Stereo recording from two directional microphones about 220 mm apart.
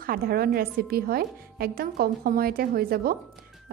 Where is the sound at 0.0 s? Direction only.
40° right (ahead or behind).